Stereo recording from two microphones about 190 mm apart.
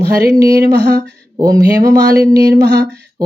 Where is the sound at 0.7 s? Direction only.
60° right (ahead or behind).